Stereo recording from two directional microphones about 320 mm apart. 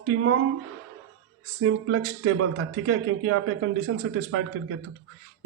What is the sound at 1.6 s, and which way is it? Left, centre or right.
A man's voice, right.